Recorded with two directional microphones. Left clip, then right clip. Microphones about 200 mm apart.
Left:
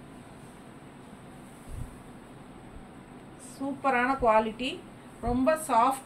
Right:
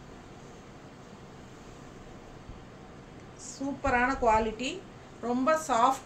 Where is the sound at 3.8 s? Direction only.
20° right (ahead or behind).